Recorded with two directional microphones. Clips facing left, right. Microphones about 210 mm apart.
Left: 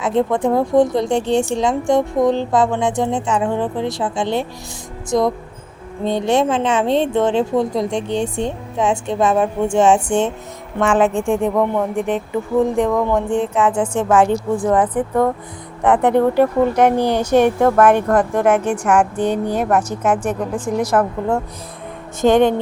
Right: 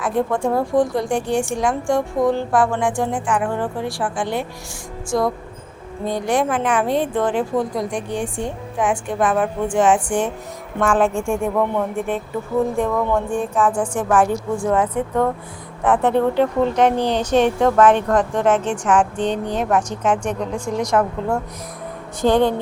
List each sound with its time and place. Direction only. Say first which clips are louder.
0.0 s a woman's voice: left 3 dB; 20° left (ahead or behind)
15.8 s speech: left 3 dB; 20° left (ahead or behind)
22.2 s a woman's voice: left 3 dB; 20° left (ahead or behind)